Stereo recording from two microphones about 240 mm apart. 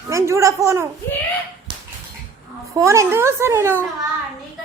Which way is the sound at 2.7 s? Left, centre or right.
Centre.